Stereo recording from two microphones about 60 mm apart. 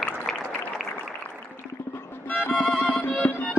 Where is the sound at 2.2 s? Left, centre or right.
Centre.